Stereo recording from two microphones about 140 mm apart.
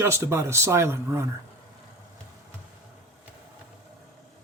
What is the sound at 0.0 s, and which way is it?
Speech, 20° right (ahead or behind).